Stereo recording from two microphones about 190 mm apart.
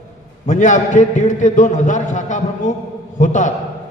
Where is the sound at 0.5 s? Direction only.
40° left (ahead or behind).